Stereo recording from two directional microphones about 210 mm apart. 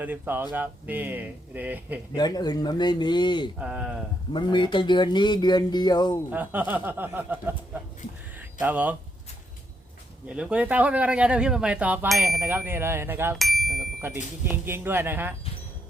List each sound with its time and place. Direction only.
0.0 s speech: 10° right (ahead or behind)
2.1 s speech: 20° left (ahead or behind)
3.6 s a man's voice: 5° right (ahead or behind)
4.3 s speech: 20° left (ahead or behind)
6.3 s speech: 10° right (ahead or behind)
8.4 s a sound: 10° right (ahead or behind)
10.2 s a man's voice: 5° right (ahead or behind)
12.3 s speech: 10° right (ahead or behind)
13.4 s ding: centre (ahead or behind)
14.0 s speech: 10° right (ahead or behind)